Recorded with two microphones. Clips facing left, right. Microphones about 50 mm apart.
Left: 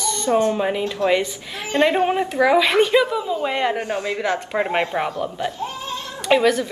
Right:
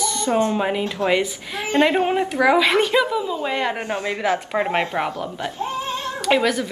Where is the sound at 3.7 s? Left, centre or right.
Right.